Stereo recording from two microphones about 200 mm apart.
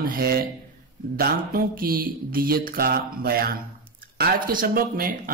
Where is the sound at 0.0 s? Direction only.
45° right (ahead or behind).